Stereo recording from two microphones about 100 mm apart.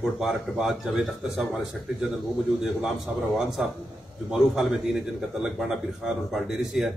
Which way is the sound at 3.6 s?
5° right (ahead or behind).